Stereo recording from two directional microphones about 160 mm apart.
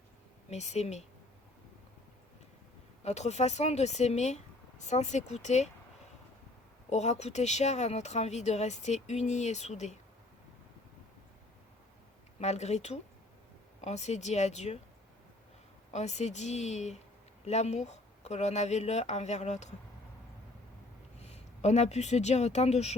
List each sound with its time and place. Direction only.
0.5 s speech: 45° left (ahead or behind)
3.0 s speech: 45° left (ahead or behind)
6.9 s speech: 45° left (ahead or behind)
12.4 s speech: 45° left (ahead or behind)
15.9 s speech: 45° left (ahead or behind)
21.2 s speech: 45° left (ahead or behind)